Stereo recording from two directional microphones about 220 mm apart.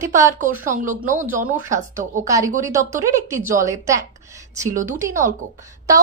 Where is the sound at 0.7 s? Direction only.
35° right (ahead or behind).